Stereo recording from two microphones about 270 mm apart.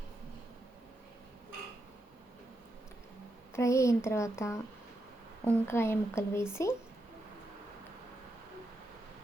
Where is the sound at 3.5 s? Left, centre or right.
Centre.